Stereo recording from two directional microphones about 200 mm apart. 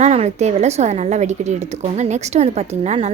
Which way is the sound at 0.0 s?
35° right (ahead or behind).